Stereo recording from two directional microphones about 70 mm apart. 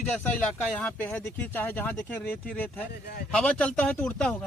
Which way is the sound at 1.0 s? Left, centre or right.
Left.